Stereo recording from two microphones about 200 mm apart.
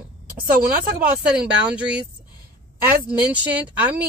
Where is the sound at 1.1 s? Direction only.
5° right (ahead or behind).